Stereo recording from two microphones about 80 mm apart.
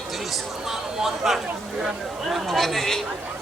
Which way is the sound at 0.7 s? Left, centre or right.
Centre.